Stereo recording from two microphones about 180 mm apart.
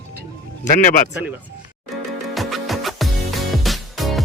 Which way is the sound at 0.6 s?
50° left (ahead or behind).